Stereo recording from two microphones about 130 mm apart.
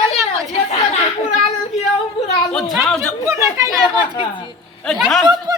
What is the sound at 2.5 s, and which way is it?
Speech, centre (ahead or behind).